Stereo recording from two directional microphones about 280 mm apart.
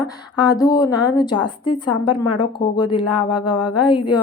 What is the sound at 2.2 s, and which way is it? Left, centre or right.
Speech, centre.